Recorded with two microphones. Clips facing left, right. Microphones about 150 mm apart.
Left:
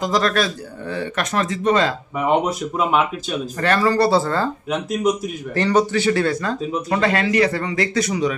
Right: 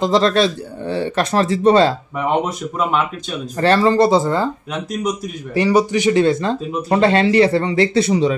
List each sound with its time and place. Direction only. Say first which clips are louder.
0.0 s speech: right 5 dB; 25° right (ahead or behind)
2.1 s speech: even; centre (ahead or behind)
3.6 s speech: right 4 dB; 25° right (ahead or behind)
5.5 s speech: right 3 dB; 10° right (ahead or behind); by 8.4 s 30° right (ahead or behind)